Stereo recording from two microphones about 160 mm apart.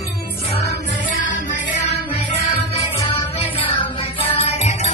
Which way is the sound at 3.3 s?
35° left (ahead or behind).